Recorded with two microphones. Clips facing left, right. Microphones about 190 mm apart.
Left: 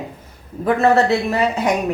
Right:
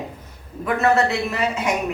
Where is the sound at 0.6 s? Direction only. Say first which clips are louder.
Left 4 dB; 35° left (ahead or behind).